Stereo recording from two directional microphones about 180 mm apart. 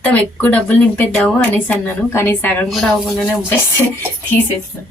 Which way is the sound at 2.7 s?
Centre (ahead or behind).